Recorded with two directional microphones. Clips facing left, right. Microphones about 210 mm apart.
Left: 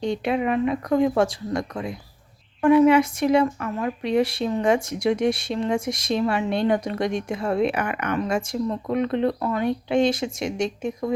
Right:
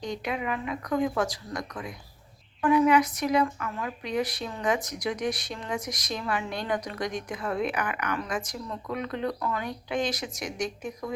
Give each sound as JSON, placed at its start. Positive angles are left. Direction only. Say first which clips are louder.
{"t": 0.0, "sound": "speech", "louder": "left 8 dB", "side_deg": 30}